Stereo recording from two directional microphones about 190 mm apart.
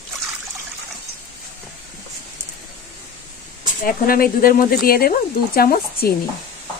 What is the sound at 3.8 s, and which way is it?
Speech, 50° left (ahead or behind).